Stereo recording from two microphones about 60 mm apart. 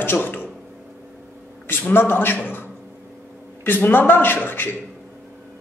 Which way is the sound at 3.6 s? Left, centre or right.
Left.